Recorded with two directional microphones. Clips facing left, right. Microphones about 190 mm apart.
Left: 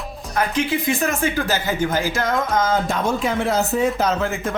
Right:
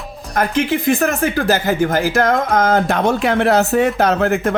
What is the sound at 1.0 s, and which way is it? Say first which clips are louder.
Speech: right 5 dB; 60° right (ahead or behind).